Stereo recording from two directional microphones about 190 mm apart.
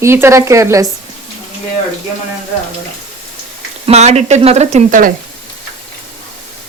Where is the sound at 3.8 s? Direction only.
35° right (ahead or behind).